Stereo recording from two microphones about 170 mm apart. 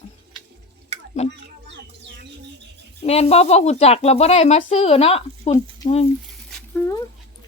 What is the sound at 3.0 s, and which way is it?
Speech, 35° left (ahead or behind).